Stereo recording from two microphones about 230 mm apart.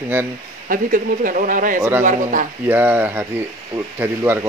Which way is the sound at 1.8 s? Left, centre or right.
Centre.